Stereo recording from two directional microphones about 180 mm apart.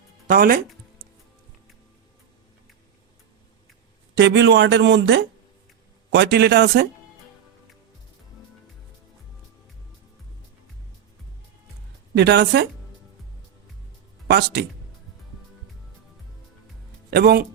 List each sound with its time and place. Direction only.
0.3 s speech: 55° right (ahead or behind)
4.1 s speech: 80° right
12.1 s speech: 70° right (ahead or behind)
14.3 s speech: 65° right (ahead or behind)
17.1 s speech: 65° right (ahead or behind)